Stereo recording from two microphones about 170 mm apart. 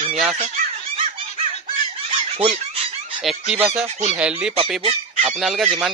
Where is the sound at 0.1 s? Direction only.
5° right (ahead or behind).